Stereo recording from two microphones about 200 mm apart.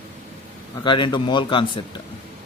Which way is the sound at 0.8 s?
25° left (ahead or behind).